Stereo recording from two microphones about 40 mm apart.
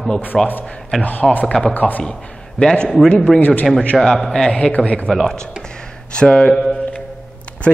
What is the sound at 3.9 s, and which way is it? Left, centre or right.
Speech, centre.